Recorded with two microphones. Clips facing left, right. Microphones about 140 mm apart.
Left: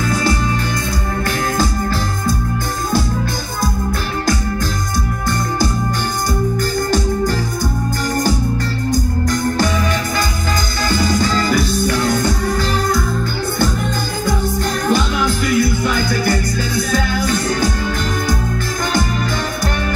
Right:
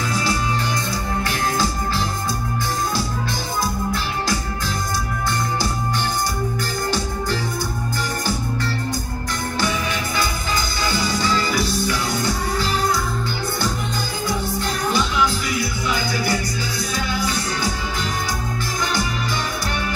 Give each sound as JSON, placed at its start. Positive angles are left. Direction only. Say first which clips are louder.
{"t": 0.1, "sound": "music", "louder": "left 6 dB", "side_deg": 50}
{"t": 10.8, "sound": "music", "louder": "left 7 dB", "side_deg": 45}
{"t": 14.9, "sound": "music", "louder": "left 3 dB", "side_deg": 50}